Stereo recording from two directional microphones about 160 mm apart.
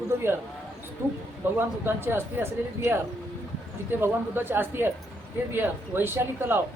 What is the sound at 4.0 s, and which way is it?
Speech, 15° right (ahead or behind).